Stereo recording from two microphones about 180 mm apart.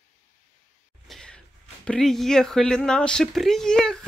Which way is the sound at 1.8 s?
Centre (ahead or behind).